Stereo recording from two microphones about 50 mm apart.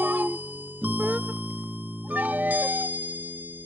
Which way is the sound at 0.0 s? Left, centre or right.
Right.